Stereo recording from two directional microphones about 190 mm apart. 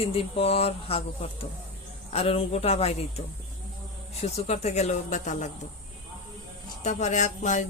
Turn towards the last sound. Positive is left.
turn(degrees=40)  # may be behind; listen again after turning